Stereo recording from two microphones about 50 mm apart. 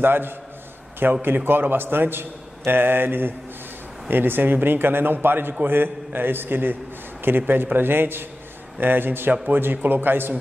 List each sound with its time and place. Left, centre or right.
0.0 s a man's voice: right